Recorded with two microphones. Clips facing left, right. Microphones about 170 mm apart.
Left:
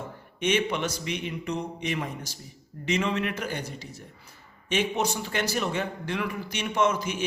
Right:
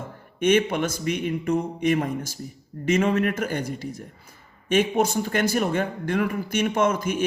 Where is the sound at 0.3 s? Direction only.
50° right (ahead or behind).